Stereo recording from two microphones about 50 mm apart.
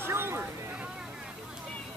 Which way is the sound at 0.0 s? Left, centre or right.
Right.